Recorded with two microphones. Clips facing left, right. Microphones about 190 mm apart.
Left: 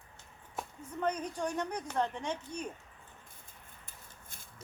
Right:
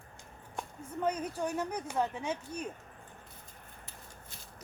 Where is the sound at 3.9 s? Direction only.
50° left (ahead or behind).